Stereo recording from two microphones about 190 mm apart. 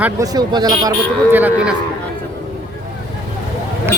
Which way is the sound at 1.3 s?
5° right (ahead or behind).